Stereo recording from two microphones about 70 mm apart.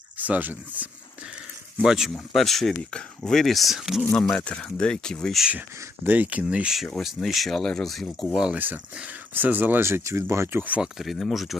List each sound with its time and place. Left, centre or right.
0.2 s speech: right
1.8 s speech: centre
4.4 s speech: centre
6.1 s speech: right
6.7 s speech: centre
8.5 s speech: right
9.8 s speech: right
10.8 s speech: centre